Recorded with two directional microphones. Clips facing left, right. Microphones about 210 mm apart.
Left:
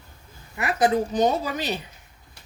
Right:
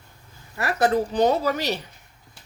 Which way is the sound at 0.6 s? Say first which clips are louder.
Even; 15° left (ahead or behind).